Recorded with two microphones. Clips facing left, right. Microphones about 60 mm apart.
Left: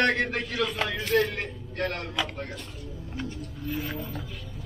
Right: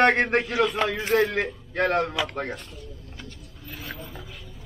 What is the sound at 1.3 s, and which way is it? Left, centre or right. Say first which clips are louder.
Speech: right 7 dB; right.